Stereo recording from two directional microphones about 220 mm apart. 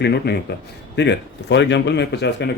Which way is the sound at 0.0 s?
50° left (ahead or behind).